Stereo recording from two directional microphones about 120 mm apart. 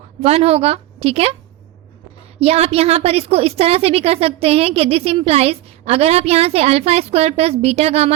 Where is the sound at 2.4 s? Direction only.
55° right (ahead or behind).